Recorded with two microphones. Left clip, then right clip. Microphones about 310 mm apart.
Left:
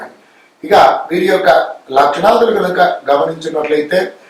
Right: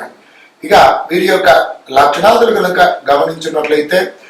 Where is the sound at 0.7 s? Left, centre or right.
Centre.